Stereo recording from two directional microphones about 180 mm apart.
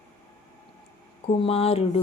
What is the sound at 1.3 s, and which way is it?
Speech, 30° left (ahead or behind).